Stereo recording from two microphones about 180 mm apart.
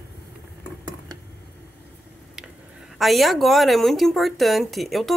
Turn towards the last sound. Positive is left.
turn(degrees=0)  # may be behind; listen again after turning